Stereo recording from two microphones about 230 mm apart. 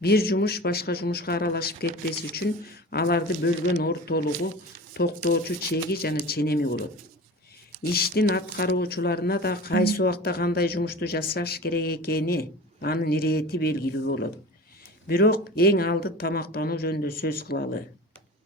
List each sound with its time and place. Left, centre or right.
0.0 s speech: left
2.9 s speech: left
7.9 s speech: left